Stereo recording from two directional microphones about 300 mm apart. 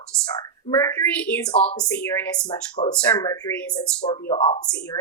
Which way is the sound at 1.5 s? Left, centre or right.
Centre.